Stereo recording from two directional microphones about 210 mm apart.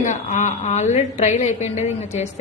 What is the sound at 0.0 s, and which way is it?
A woman's voice, 35° left (ahead or behind).